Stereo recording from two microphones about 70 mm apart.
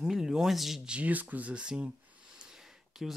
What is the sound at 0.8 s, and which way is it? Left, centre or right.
Speech, centre.